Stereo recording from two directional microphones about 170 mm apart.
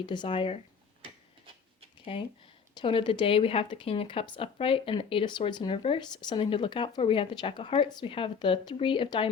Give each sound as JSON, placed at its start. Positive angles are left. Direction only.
{"t": 0.0, "sound": "speech", "side_deg": 25}
{"t": 2.1, "sound": "speech", "side_deg": 35}